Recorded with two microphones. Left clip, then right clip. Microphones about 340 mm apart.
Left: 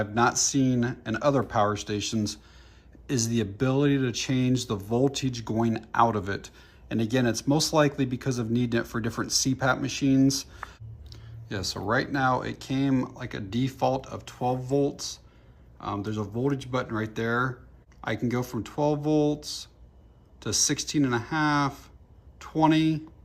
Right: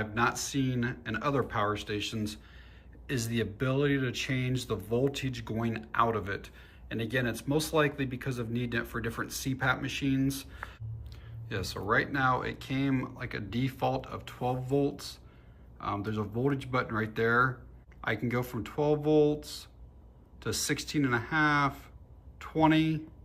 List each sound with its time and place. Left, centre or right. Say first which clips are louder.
0.0 s speech: left 6 dB; centre